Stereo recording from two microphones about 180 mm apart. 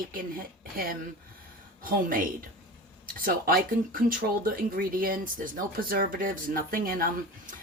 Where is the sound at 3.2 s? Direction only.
55° right (ahead or behind).